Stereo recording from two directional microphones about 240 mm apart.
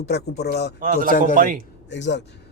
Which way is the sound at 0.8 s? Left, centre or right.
Right.